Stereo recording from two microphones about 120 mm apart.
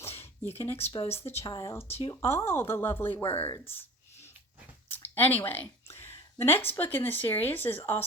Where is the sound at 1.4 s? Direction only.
30° left (ahead or behind).